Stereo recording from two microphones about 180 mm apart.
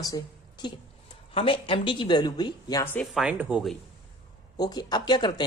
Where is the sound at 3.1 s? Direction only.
5° right (ahead or behind).